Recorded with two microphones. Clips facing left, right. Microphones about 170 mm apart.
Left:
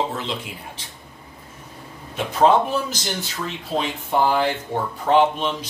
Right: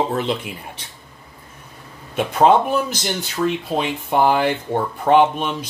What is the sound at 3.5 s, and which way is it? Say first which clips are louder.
Speech: right 4 dB; 60° right (ahead or behind).